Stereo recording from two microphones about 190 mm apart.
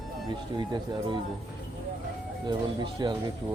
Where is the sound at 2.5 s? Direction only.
25° right (ahead or behind).